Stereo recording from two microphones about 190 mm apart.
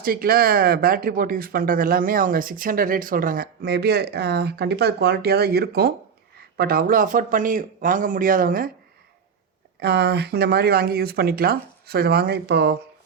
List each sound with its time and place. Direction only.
0.0 s speech: 50° right (ahead or behind)
9.8 s speech: 60° right (ahead or behind)